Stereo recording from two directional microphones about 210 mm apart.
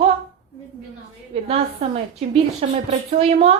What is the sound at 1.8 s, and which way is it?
A woman's voice, 30° right (ahead or behind).